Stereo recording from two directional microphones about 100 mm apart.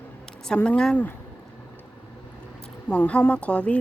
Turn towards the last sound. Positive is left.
turn(degrees=10)  # may be behind; listen again after turning